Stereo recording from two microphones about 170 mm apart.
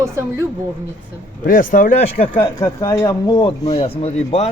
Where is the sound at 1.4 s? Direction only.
55° left (ahead or behind).